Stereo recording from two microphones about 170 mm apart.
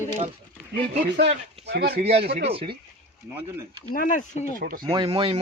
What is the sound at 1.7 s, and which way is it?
Speech, 70° right (ahead or behind).